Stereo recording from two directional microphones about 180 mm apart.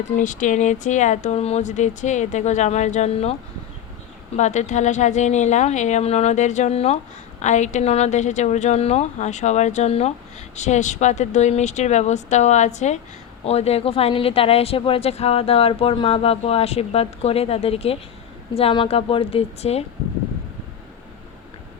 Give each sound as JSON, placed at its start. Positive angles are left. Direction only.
{"t": 0.2, "sound": "a woman's voice", "side_deg": 45}
{"t": 4.4, "sound": "a woman's voice", "side_deg": 40}